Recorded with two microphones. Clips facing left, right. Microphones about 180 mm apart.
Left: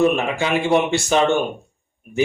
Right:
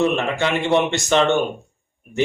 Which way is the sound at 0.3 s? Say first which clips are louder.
Even; 10° left (ahead or behind).